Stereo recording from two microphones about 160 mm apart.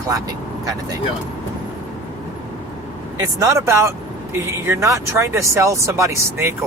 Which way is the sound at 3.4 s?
20° right (ahead or behind).